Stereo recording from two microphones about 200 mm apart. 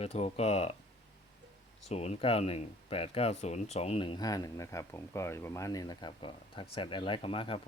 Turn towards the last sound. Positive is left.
turn(degrees=25)  # may be behind; listen again after turning